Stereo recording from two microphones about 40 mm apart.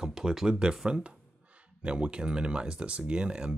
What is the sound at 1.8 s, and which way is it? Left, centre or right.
Speech, right.